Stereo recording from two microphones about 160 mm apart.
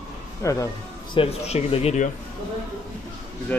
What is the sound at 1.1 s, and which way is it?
Speech, 40° left (ahead or behind).